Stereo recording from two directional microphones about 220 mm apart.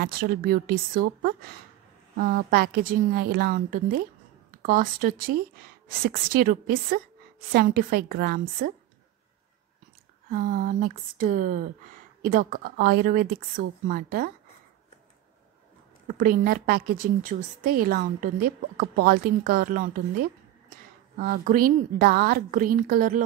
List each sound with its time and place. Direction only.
0.0 s a woman's voice: 40° right (ahead or behind)
10.3 s a woman's voice: 40° right (ahead or behind)
16.1 s a woman's voice: 40° right (ahead or behind)
21.2 s a woman's voice: 40° right (ahead or behind)